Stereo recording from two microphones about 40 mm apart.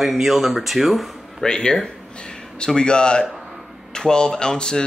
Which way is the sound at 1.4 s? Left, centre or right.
Centre.